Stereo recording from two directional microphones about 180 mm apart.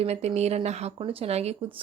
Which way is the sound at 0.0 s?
35° right (ahead or behind).